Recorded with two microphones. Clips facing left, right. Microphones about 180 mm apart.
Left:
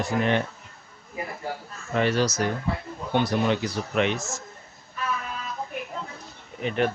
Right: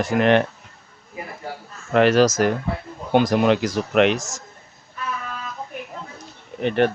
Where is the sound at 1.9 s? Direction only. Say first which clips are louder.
Right 8 dB; 90° right.